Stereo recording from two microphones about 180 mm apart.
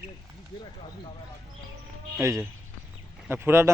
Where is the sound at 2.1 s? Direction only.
15° right (ahead or behind).